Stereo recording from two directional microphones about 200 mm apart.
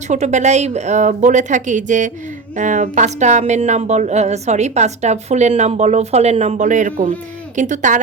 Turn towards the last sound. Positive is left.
turn(degrees=-40)  # may be behind; listen again after turning